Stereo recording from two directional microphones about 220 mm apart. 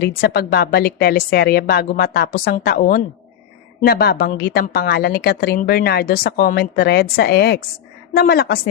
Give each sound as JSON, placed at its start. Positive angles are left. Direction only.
{"t": 0.0, "sound": "a woman's voice", "side_deg": 45}